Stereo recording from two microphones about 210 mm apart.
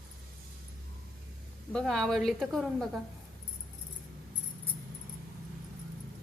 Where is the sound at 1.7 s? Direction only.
5° left (ahead or behind).